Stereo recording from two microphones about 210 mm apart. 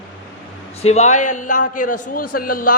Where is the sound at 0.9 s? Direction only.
35° left (ahead or behind).